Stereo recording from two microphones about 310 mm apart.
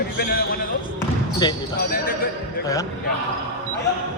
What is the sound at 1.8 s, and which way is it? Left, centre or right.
Speech, left.